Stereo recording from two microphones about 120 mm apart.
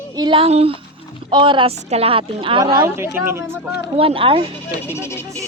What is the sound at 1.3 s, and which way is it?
Speech, 40° right (ahead or behind).